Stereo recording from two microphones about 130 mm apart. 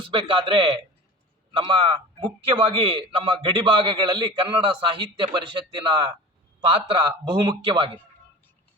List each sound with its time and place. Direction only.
0.0 s a man's voice: 40° right (ahead or behind)